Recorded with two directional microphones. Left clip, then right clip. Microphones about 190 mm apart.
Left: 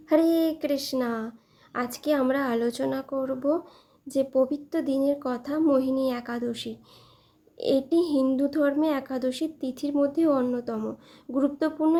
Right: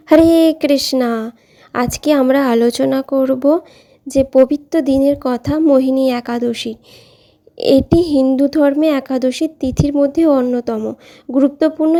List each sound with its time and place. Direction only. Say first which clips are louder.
0.1 s a woman's voice: right 13 dB; 45° right (ahead or behind)